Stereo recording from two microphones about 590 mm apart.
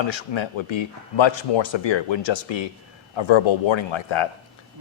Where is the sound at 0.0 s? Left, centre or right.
Left.